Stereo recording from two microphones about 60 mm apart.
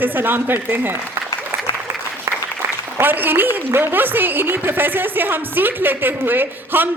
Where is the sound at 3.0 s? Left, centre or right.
Right.